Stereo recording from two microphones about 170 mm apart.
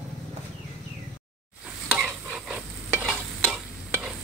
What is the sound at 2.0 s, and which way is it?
Stir, 5° right (ahead or behind).